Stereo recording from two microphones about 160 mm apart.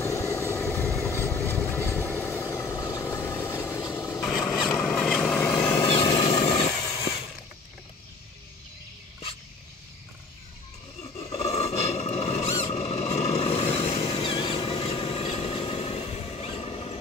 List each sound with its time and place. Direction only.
0.0 s vehicle: 20° left (ahead or behind)
4.2 s vehicle: centre (ahead or behind)
5.6 s vehicle: 15° left (ahead or behind)
6.4 s vehicle: 35° left (ahead or behind)
11.3 s a sound: 40° left (ahead or behind)
12.7 s squeal: 40° left (ahead or behind)
13.6 s vehicle: 40° left (ahead or behind)